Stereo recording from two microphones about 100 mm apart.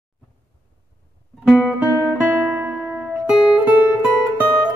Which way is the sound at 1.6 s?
15° right (ahead or behind).